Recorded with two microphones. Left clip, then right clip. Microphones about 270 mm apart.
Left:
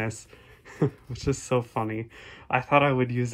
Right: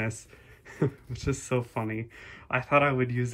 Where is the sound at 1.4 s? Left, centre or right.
Centre.